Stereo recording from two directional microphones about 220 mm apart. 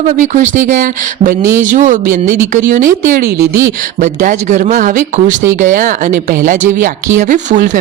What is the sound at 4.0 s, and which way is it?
Speech, 35° right (ahead or behind).